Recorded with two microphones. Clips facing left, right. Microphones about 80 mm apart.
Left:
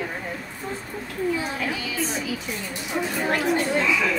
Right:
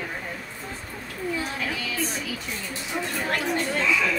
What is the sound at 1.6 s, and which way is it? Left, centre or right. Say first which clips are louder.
Speech: left 2 dB; centre.